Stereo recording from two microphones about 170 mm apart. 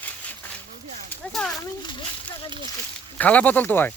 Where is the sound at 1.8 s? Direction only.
25° left (ahead or behind).